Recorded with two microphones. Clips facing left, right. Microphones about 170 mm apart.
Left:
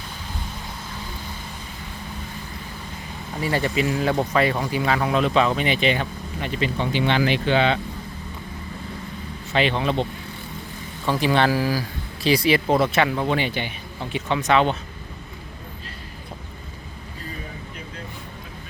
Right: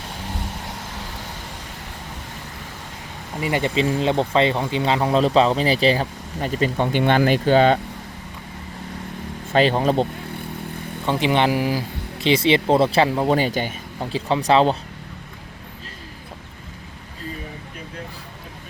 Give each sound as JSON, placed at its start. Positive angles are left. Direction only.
{"t": 0.0, "sound": "vehicle", "side_deg": -75}
{"t": 3.4, "sound": "speech", "side_deg": -20}
{"t": 9.5, "sound": "speech", "side_deg": -40}
{"t": 11.0, "sound": "speech", "side_deg": -20}